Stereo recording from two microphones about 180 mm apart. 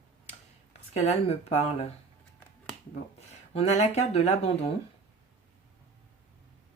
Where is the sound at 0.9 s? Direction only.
35° left (ahead or behind).